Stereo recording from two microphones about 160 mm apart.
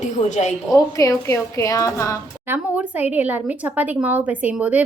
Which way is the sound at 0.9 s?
20° left (ahead or behind).